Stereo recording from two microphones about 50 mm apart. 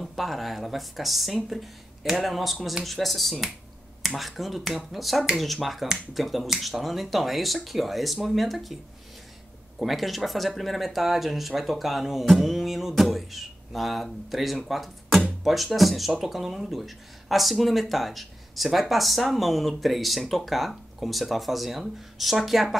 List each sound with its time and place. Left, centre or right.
0.0 s speech: centre
9.8 s speech: centre